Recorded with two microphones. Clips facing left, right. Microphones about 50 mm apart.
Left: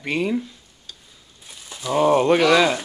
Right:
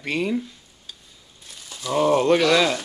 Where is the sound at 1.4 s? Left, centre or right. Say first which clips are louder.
Left 2 dB; centre.